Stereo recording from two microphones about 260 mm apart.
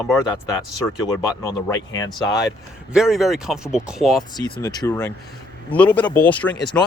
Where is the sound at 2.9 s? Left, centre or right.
Centre.